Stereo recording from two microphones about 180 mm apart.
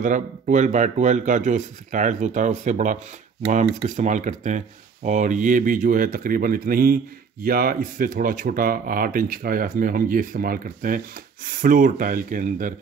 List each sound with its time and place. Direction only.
0.0 s speech: 45° right (ahead or behind)